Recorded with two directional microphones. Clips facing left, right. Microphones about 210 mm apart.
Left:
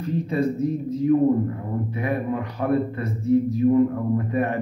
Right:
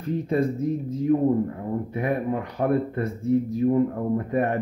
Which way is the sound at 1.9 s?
50° right (ahead or behind).